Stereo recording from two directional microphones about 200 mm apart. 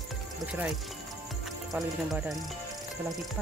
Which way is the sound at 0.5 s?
5° right (ahead or behind).